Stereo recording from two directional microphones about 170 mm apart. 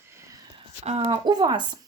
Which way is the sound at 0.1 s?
15° right (ahead or behind).